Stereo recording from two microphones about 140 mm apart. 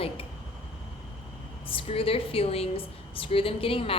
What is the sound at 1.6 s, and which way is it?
A woman's voice, 40° left (ahead or behind).